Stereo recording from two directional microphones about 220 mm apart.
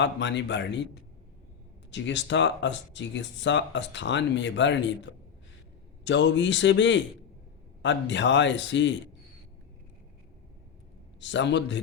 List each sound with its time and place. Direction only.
0.0 s speech: 55° left (ahead or behind)
1.9 s speech: 55° left (ahead or behind)
6.1 s speech: 55° left (ahead or behind)
11.2 s speech: 55° left (ahead or behind)